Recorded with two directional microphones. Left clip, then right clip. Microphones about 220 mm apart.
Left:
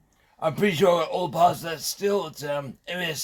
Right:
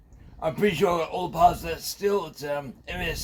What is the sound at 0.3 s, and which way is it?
A man's voice, 35° left (ahead or behind).